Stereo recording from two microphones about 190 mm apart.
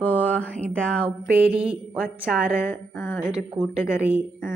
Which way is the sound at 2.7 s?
10° left (ahead or behind).